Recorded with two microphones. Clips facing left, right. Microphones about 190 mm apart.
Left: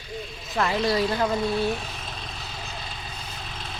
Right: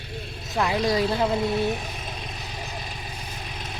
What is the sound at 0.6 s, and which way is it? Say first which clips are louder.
Speech: even; 15° right (ahead or behind).